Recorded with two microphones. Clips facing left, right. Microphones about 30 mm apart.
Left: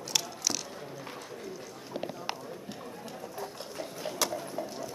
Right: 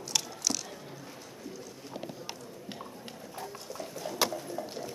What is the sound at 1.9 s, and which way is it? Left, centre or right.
Clip-clop, centre.